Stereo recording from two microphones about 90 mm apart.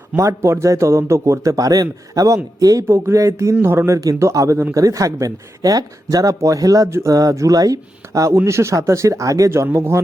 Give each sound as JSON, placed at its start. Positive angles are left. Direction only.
{"t": 0.2, "sound": "speech", "side_deg": -30}
{"t": 2.8, "sound": "speech", "side_deg": -30}